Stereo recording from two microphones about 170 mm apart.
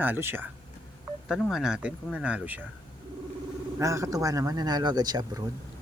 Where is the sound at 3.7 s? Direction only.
20° right (ahead or behind).